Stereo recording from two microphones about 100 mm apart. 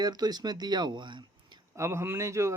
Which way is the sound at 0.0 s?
40° right (ahead or behind).